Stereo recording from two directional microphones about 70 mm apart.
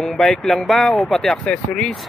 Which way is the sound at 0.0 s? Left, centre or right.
Centre.